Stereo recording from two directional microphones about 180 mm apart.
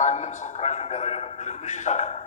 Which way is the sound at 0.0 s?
40° left (ahead or behind).